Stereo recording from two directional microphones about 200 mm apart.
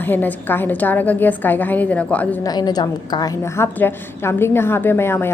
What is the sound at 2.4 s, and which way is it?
A woman's voice, 20° left (ahead or behind).